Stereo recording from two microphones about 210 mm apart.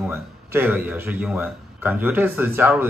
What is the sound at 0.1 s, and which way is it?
Speech, 10° right (ahead or behind).